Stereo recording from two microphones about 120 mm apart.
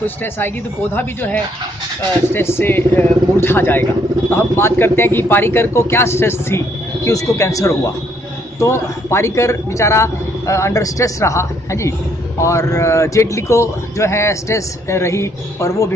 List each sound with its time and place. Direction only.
0.0 s speech: 15° left (ahead or behind)